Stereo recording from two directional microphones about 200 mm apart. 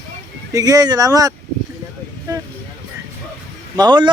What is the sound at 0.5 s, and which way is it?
Speech, 20° right (ahead or behind).